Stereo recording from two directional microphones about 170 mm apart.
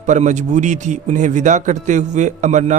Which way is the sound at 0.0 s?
45° right (ahead or behind).